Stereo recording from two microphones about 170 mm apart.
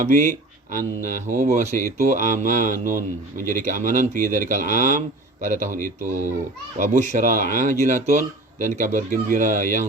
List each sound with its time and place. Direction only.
0.0 s speech: 50° right (ahead or behind)